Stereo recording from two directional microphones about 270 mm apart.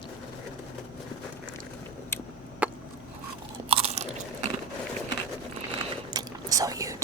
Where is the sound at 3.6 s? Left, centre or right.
Right.